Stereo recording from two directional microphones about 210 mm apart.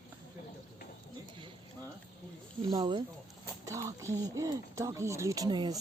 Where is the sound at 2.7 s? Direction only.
20° right (ahead or behind).